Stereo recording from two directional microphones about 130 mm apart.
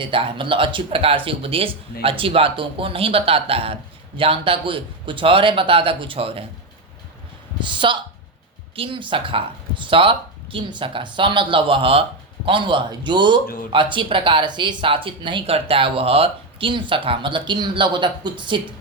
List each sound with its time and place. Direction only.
0.0 s speech: 45° right (ahead or behind)
7.6 s speech: 40° right (ahead or behind)